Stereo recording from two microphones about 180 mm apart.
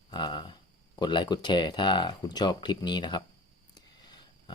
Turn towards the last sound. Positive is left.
turn(degrees=25)  # may be behind; listen again after turning